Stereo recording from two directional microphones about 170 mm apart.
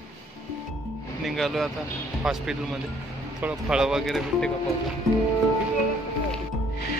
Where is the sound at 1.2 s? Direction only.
Centre (ahead or behind).